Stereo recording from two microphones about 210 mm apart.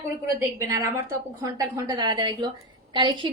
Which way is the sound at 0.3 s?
15° right (ahead or behind).